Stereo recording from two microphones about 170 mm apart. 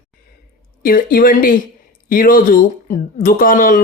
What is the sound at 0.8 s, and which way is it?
Speech, 60° left (ahead or behind).